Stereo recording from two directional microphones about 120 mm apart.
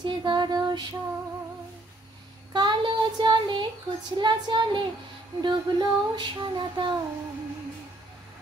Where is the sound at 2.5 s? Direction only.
40° right (ahead or behind).